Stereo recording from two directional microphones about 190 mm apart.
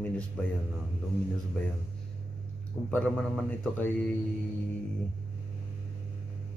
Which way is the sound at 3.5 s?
10° left (ahead or behind).